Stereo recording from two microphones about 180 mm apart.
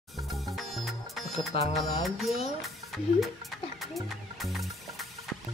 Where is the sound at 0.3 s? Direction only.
Centre (ahead or behind).